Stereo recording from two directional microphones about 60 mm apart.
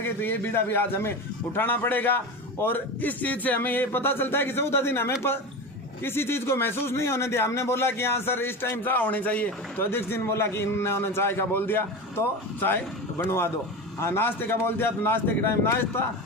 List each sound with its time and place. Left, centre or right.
0.0 s a man's voice: left
9.7 s a man's voice: left